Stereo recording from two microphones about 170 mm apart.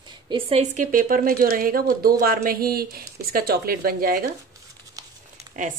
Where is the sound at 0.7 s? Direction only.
55° right (ahead or behind).